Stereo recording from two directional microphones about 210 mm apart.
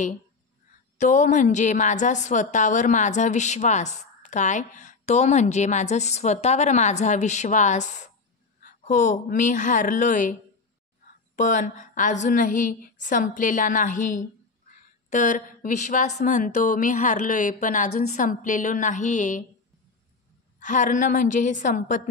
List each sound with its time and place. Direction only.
0.9 s a woman's voice: 35° left (ahead or behind)
11.3 s a woman's voice: 35° left (ahead or behind)
20.6 s a woman's voice: 35° left (ahead or behind)